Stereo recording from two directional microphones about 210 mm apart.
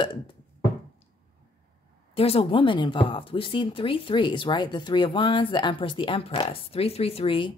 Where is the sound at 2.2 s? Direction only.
25° left (ahead or behind).